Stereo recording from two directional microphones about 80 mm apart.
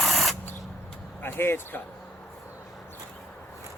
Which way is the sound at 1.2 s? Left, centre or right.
Left.